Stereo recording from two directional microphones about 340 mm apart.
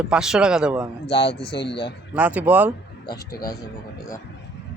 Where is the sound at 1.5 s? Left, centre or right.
Left.